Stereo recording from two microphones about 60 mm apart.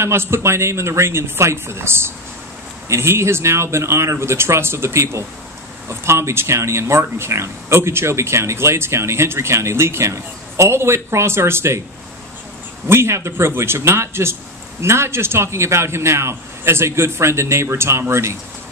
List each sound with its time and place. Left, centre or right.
0.0 s speech: right
12.8 s speech: right